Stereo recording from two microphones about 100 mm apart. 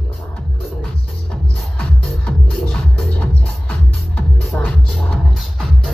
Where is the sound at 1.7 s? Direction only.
10° left (ahead or behind).